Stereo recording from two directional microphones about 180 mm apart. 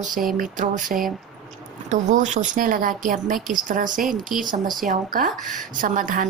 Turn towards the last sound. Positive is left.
turn(degrees=-50)  # may be behind; listen again after turning